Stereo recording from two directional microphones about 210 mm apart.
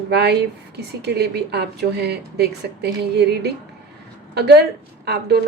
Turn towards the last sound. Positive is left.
turn(degrees=-50)  # may be behind; listen again after turning